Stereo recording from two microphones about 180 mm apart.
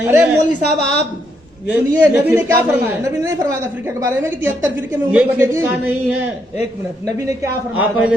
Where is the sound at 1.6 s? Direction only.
10° right (ahead or behind).